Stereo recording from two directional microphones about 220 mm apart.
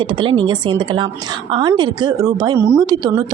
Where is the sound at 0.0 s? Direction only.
20° right (ahead or behind).